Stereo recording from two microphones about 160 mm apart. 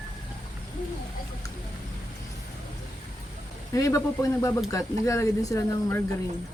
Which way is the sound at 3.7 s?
20° left (ahead or behind).